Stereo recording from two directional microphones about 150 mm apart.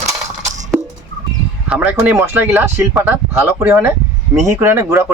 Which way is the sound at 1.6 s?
10° right (ahead or behind).